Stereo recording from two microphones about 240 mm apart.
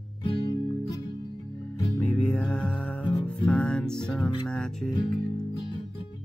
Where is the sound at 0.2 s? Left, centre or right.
Left.